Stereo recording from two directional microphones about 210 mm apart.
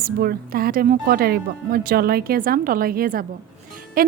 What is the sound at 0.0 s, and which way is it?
A woman's voice, 45° right (ahead or behind).